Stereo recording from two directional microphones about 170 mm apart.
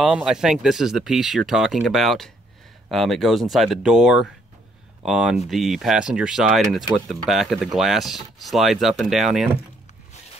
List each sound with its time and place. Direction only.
0.0 s speech: 5° right (ahead or behind)